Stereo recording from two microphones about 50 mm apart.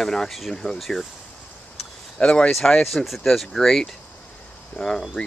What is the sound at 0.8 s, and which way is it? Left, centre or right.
Speech, centre.